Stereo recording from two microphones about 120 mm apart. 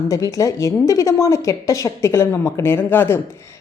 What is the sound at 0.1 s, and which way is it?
A woman's voice, 30° left (ahead or behind).